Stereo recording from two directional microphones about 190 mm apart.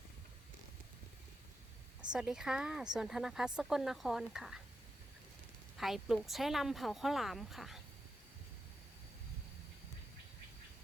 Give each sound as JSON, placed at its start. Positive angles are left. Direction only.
{"t": 2.1, "sound": "speech", "side_deg": -5}
{"t": 5.7, "sound": "speech", "side_deg": 0}